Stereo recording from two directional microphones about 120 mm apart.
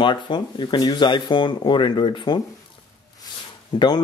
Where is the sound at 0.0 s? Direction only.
40° left (ahead or behind).